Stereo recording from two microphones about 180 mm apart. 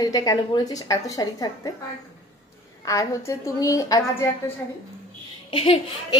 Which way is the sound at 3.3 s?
15° left (ahead or behind).